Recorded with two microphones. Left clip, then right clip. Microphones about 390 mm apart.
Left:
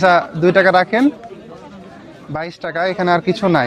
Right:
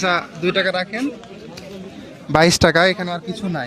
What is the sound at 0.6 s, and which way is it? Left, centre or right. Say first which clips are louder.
Speech: left 9 dB; left.